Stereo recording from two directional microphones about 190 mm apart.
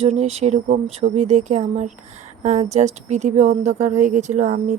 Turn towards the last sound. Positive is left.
turn(degrees=-40)  # may be behind; listen again after turning